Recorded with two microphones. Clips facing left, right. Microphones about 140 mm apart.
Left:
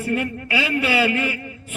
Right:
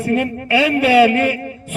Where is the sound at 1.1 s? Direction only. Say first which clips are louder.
Right 7 dB; 50° right (ahead or behind).